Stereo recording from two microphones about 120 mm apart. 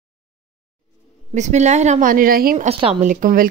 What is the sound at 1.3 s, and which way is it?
Speech, 75° right (ahead or behind).